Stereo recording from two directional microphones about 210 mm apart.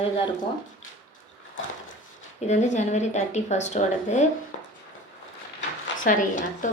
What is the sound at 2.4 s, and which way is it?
Speech, 35° left (ahead or behind).